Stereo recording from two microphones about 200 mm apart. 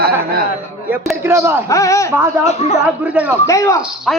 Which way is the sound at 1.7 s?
15° left (ahead or behind).